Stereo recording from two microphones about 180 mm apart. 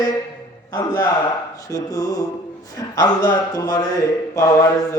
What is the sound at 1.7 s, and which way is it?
A man's voice, 20° left (ahead or behind).